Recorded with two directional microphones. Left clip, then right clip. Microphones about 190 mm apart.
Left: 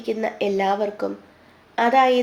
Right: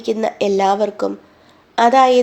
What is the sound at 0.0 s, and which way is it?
Speech, 35° right (ahead or behind).